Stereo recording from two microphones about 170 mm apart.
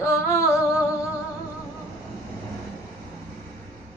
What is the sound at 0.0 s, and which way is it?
Music, 15° left (ahead or behind).